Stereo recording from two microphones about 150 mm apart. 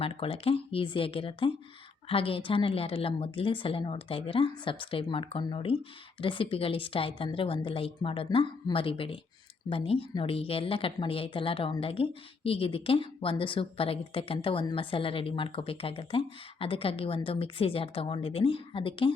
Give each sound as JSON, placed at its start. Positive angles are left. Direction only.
{"t": 0.0, "sound": "speech", "side_deg": 40}